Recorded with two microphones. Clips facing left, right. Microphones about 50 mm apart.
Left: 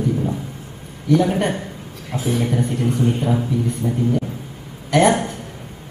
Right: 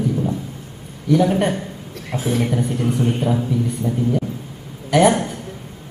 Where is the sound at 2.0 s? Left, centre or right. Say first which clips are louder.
Right 1 dB; right.